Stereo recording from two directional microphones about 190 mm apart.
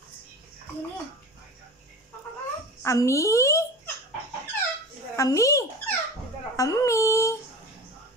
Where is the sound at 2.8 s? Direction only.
15° left (ahead or behind).